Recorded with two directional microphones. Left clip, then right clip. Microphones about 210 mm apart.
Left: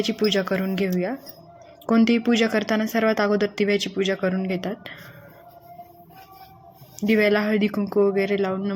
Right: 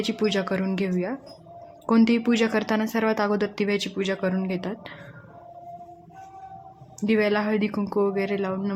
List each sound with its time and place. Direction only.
0.0 s speech: 5° left (ahead or behind)
7.0 s speech: 10° left (ahead or behind)